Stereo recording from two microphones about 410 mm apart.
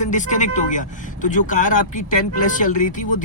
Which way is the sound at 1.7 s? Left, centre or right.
Left.